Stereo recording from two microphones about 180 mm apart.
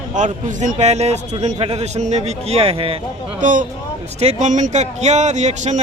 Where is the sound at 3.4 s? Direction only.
45° right (ahead or behind).